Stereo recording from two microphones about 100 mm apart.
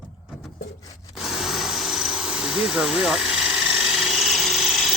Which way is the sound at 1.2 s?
5° right (ahead or behind).